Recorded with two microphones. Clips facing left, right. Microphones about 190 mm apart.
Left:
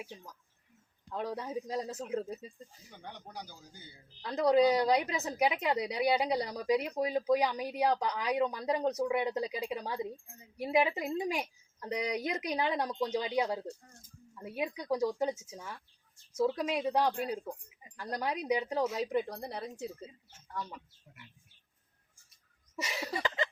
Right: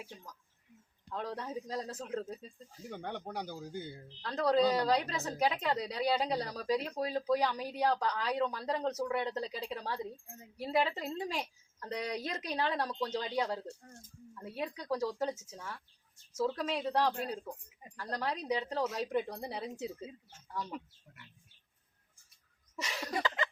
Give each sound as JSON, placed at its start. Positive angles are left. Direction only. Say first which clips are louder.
{"t": 1.1, "sound": "a woman's voice", "louder": "left 3 dB", "side_deg": 10}
{"t": 2.9, "sound": "speech", "louder": "right 7 dB", "side_deg": -55}
{"t": 4.2, "sound": "a woman's voice", "louder": "left 3 dB", "side_deg": 10}
{"t": 22.7, "sound": "a sound", "louder": "even", "side_deg": 10}